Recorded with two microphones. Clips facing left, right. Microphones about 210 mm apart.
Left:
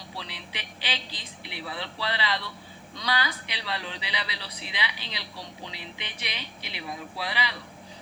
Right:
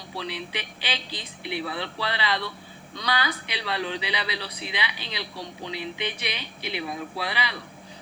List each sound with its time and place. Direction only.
0.2 s speech: 60° right (ahead or behind)